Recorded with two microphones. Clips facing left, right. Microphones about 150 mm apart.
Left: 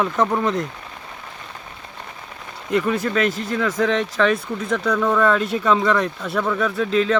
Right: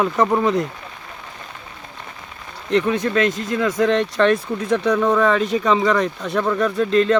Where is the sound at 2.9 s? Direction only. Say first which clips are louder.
Right 2 dB; 5° left (ahead or behind).